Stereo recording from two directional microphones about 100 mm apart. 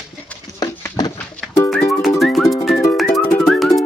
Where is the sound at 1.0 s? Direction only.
40° left (ahead or behind).